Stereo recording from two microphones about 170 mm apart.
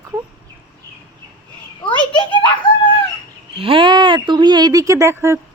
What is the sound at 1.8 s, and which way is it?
Speech, 30° left (ahead or behind).